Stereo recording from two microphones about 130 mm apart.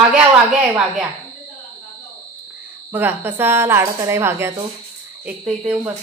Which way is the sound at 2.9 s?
15° right (ahead or behind).